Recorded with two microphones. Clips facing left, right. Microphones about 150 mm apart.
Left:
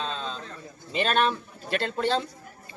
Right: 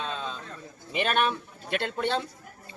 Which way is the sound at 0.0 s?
10° right (ahead or behind).